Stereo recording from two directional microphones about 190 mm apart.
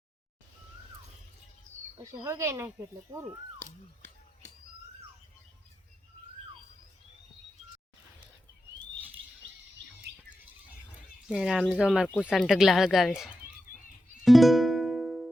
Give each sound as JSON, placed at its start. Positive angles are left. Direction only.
{"t": 2.2, "sound": "speech", "side_deg": -15}
{"t": 11.3, "sound": "speech", "side_deg": -5}
{"t": 14.3, "sound": "music", "side_deg": 0}